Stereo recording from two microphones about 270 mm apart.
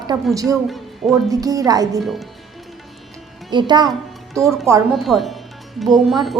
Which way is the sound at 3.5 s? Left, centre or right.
Centre.